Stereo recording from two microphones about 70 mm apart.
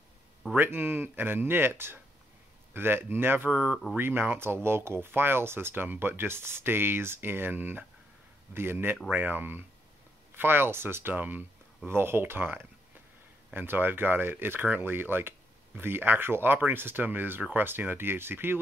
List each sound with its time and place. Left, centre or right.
0.6 s speech: right